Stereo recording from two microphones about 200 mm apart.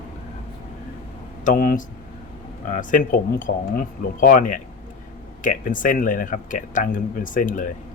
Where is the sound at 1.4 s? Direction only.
45° left (ahead or behind).